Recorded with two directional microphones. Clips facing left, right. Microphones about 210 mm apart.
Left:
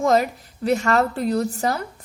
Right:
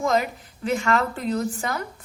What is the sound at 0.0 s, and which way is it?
A woman's voice, 40° left (ahead or behind).